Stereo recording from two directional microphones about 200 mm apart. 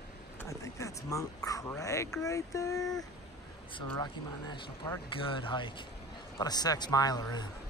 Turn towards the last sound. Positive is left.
turn(degrees=20)  # may be behind; listen again after turning